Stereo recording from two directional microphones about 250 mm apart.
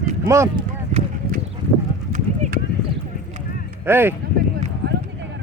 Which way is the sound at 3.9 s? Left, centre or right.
Centre.